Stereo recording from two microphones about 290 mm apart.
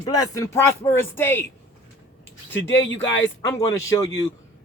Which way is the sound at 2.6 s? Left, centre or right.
Left.